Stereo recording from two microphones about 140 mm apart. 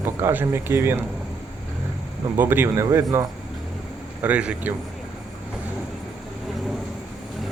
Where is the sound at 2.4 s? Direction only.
15° right (ahead or behind).